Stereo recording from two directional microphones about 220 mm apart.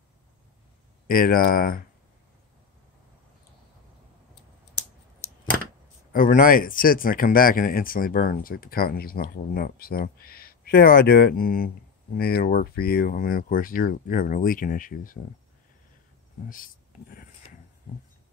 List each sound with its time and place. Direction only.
1.0 s speech: 40° left (ahead or behind)
6.1 s speech: 40° left (ahead or behind)
16.4 s a sound: 40° left (ahead or behind)